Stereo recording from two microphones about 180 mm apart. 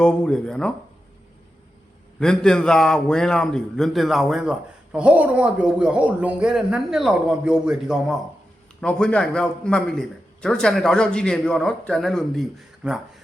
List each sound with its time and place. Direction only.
0.0 s a man's voice: 5° left (ahead or behind)
2.1 s a man's voice: 5° left (ahead or behind)